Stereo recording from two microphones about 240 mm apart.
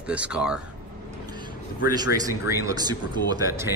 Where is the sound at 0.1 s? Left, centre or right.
Centre.